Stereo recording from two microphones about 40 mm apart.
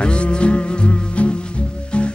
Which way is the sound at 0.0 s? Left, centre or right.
Left.